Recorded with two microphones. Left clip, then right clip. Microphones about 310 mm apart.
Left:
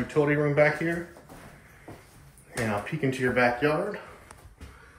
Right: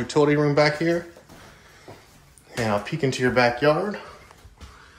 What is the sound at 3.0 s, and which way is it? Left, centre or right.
Speech, centre.